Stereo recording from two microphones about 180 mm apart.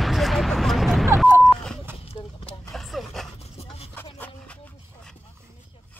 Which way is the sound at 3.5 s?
35° left (ahead or behind).